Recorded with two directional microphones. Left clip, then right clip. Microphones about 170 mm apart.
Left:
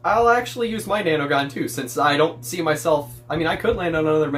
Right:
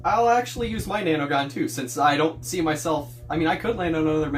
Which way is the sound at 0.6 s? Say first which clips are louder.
Left 4 dB; 40° left (ahead or behind).